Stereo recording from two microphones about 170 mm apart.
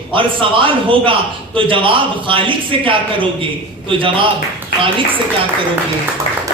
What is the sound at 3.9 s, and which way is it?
Speech, 30° right (ahead or behind).